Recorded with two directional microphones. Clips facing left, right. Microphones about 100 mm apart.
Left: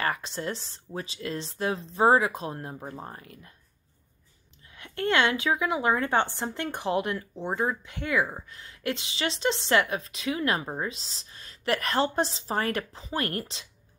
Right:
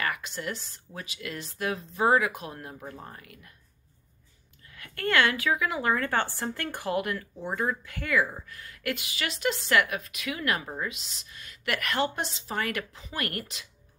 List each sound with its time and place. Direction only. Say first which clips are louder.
0.0 s speech: left 2 dB; 30° left (ahead or behind)
4.7 s speech: left 1 dB; 20° left (ahead or behind)